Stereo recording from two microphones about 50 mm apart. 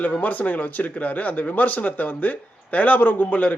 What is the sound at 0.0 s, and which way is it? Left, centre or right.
Speech, left.